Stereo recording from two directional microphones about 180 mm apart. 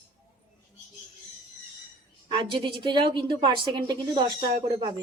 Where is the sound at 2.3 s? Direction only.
25° right (ahead or behind).